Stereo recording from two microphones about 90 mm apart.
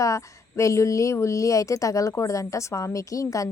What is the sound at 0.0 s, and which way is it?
A woman's voice, 35° left (ahead or behind).